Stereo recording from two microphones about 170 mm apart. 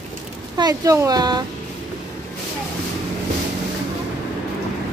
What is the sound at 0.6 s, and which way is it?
Speech, 20° right (ahead or behind).